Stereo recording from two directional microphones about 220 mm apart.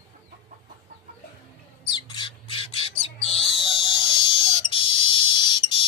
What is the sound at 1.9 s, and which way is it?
Squawk, 20° left (ahead or behind).